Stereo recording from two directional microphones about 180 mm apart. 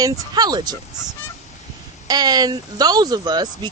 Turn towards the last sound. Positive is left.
turn(degrees=-25)  # may be behind; listen again after turning